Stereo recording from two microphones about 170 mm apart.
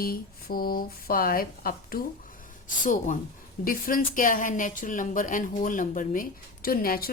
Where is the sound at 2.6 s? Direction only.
50° left (ahead or behind).